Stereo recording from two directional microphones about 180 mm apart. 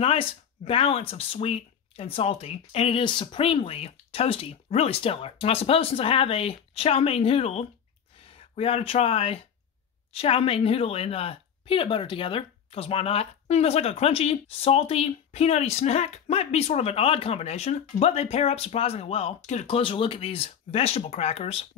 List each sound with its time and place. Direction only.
0.0 s speech: 30° left (ahead or behind)